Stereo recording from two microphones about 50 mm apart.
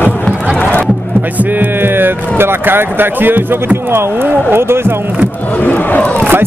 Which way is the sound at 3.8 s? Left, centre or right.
Right.